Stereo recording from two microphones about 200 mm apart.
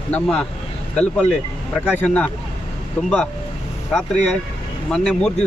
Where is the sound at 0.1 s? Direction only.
5° left (ahead or behind).